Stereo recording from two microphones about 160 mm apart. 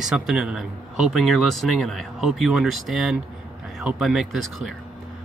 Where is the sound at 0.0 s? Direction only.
Centre (ahead or behind).